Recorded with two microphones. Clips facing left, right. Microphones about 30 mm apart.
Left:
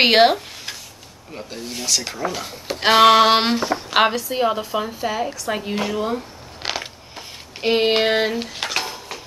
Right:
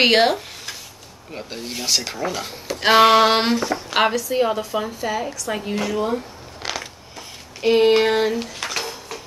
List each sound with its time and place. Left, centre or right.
0.0 s speech: centre
1.3 s speech: centre
6.6 s a sound: left